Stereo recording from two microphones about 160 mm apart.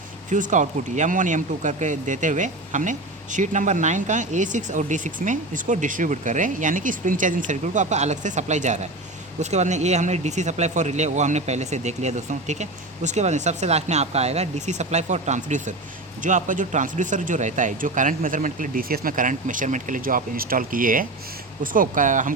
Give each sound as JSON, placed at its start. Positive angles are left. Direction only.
{"t": 0.3, "sound": "speech", "side_deg": -50}